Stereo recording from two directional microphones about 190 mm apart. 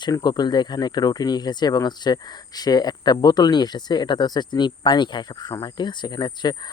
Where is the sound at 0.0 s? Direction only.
20° left (ahead or behind).